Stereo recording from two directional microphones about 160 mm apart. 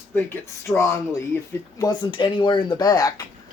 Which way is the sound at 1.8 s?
25° left (ahead or behind).